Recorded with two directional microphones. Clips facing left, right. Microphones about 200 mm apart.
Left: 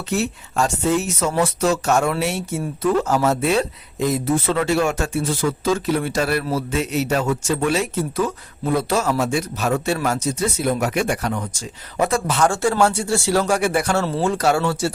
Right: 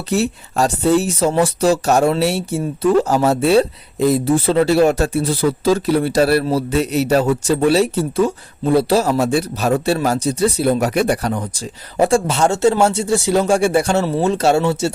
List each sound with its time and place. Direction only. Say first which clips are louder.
0.1 s speech: right 5 dB; 35° right (ahead or behind)